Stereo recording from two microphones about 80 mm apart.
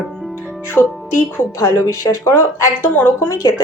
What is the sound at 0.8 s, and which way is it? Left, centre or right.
A woman's voice, left.